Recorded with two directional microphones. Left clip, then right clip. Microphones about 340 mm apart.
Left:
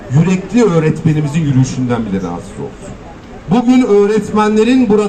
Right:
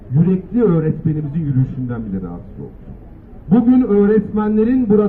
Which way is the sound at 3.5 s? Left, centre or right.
Left.